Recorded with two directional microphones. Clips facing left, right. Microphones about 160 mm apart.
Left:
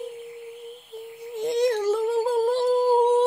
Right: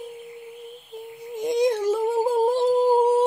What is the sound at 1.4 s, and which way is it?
Humming, 15° right (ahead or behind).